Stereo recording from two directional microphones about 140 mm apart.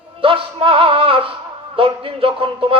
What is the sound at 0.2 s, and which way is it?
Music, 40° right (ahead or behind).